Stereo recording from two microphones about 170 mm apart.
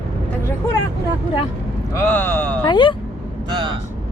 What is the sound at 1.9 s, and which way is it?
Speech, 15° left (ahead or behind).